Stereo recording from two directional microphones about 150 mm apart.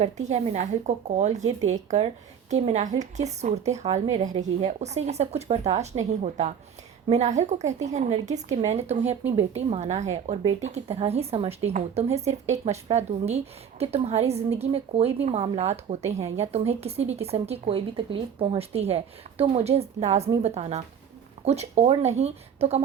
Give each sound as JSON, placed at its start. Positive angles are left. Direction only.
{"t": 0.0, "sound": "speech", "side_deg": -45}